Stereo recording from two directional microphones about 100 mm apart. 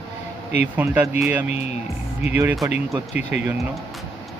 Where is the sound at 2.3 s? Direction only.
15° right (ahead or behind).